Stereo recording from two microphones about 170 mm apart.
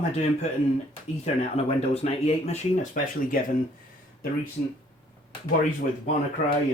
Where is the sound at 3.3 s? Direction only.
55° left (ahead or behind).